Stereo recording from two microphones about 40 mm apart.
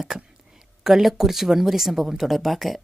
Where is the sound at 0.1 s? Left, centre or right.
Right.